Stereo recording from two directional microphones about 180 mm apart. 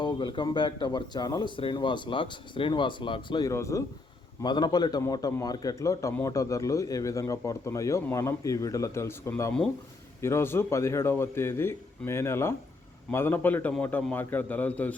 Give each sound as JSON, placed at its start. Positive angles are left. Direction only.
{"t": 0.0, "sound": "a man's voice", "side_deg": 25}